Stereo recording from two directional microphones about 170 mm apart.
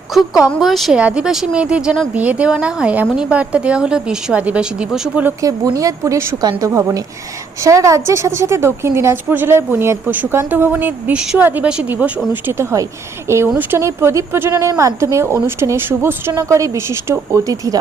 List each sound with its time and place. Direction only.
0.1 s a woman's voice: 5° right (ahead or behind)
5.4 s a woman's voice: 20° right (ahead or behind)